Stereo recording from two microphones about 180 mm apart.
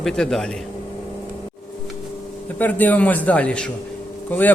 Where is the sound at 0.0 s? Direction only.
5° left (ahead or behind).